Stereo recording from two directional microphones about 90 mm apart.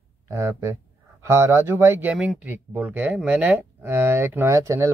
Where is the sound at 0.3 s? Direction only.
30° right (ahead or behind).